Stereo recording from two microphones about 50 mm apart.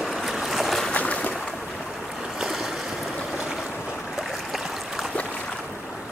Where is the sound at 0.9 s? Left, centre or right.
Left.